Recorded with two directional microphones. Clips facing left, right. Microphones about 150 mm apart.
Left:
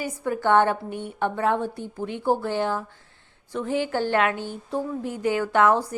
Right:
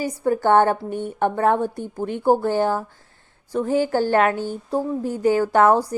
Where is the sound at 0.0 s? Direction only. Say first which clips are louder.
Right 5 dB; 40° right (ahead or behind).